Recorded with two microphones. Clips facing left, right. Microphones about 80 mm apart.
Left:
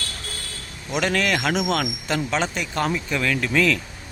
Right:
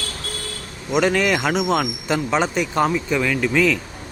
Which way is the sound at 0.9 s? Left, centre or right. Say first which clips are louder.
Right 4 dB; centre.